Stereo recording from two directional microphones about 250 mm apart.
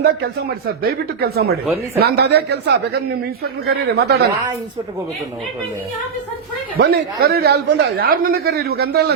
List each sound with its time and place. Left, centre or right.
0.0 s speech: right
6.7 s speech: right